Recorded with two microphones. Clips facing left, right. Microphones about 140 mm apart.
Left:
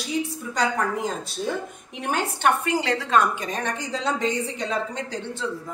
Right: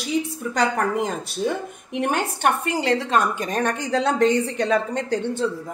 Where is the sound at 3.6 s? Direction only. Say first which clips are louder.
Right 6 dB; 60° right (ahead or behind).